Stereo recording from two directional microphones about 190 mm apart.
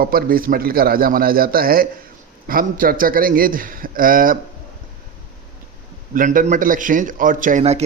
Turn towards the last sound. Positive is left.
turn(degrees=-35)  # may be behind; listen again after turning